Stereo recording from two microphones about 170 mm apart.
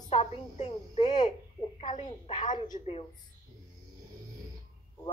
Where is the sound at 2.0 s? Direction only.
30° left (ahead or behind).